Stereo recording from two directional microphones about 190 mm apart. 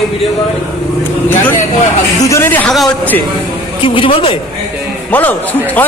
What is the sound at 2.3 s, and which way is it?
Speech, 15° left (ahead or behind).